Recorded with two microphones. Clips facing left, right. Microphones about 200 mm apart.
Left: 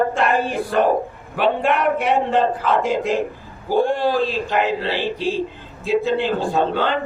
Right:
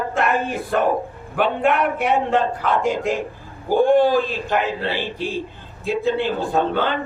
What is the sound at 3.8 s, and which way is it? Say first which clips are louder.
A man's voice: right 4 dB; 50° right (ahead or behind).